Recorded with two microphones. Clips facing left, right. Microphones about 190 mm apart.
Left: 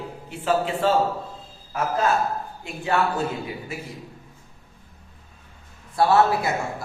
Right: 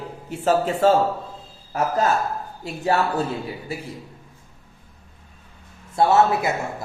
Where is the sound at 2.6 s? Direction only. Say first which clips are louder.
Right 2 dB; 40° right (ahead or behind).